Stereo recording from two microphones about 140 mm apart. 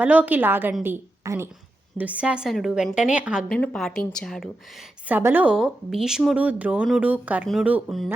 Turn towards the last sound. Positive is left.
turn(degrees=-10)  # may be behind; listen again after turning